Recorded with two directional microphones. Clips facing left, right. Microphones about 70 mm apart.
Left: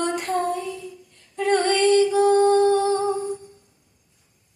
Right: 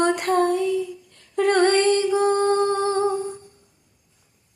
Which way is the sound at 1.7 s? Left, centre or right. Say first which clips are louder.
Left 1 dB; right.